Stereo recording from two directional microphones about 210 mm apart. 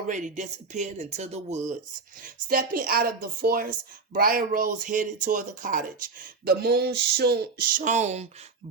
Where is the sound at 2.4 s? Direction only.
40° right (ahead or behind).